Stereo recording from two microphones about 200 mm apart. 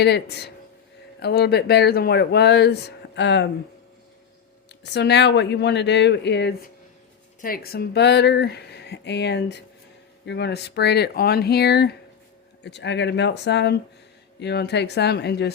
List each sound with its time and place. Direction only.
0.0 s speech: 55° left (ahead or behind)
4.7 s speech: 55° left (ahead or behind)
7.4 s speech: 50° left (ahead or behind)